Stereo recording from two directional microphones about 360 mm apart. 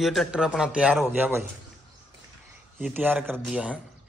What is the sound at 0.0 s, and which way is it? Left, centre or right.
A man's voice, centre.